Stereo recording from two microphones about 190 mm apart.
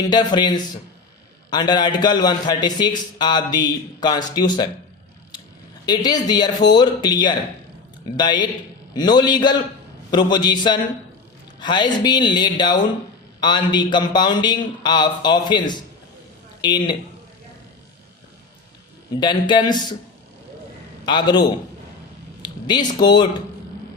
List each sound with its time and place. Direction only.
0.1 s a man's voice: 20° left (ahead or behind)
5.8 s a man's voice: 20° left (ahead or behind)
19.2 s a man's voice: 25° left (ahead or behind)
21.0 s a man's voice: 25° left (ahead or behind)